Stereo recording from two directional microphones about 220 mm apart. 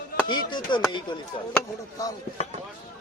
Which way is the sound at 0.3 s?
20° left (ahead or behind).